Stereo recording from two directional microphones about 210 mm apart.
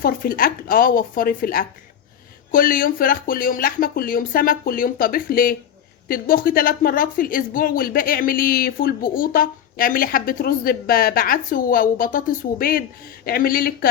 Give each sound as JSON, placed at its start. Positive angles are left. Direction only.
{"t": 0.0, "sound": "speech", "side_deg": 45}